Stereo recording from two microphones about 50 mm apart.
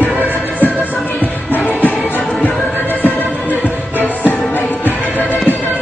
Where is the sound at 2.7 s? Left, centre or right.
Left.